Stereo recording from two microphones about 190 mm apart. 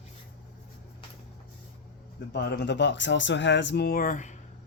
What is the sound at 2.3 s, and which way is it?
Speech, 60° left (ahead or behind).